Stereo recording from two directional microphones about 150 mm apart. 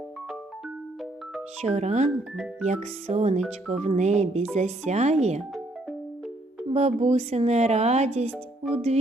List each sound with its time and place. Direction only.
1.6 s speech: 50° right (ahead or behind)
2.0 s speech: 5° right (ahead or behind)
2.6 s speech: 45° right (ahead or behind)
6.7 s speech: 45° right (ahead or behind)